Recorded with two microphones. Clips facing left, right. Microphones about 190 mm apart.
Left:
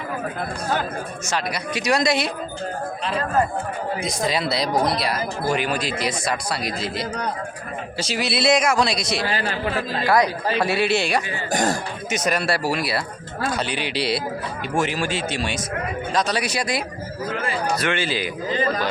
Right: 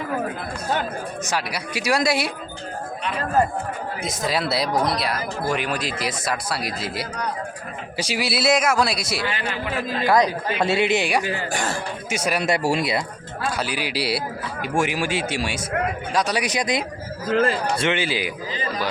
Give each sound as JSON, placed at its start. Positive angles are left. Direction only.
{"t": 1.3, "sound": "speech", "side_deg": -10}
{"t": 4.0, "sound": "speech", "side_deg": -5}
{"t": 9.2, "sound": "speech", "side_deg": 35}
{"t": 10.0, "sound": "a man's voice", "side_deg": -20}
{"t": 11.5, "sound": "speech", "side_deg": 40}
{"t": 12.1, "sound": "speech", "side_deg": -10}
{"t": 12.5, "sound": "a man's voice", "side_deg": -25}
{"t": 13.6, "sound": "speech", "side_deg": -5}